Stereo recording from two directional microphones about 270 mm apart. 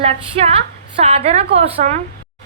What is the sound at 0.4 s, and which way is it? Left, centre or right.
A woman's voice, right.